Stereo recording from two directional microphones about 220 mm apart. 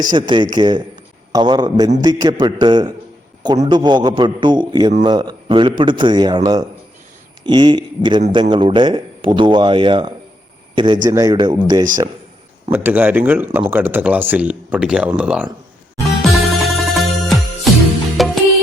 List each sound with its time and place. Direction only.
0.0 s a man's voice: 20° right (ahead or behind)
16.2 s music: centre (ahead or behind)